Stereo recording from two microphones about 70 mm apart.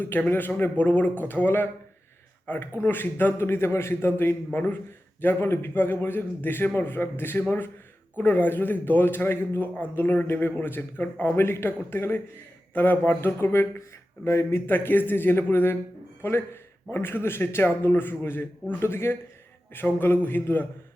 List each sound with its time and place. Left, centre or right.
0.0 s a man's voice: left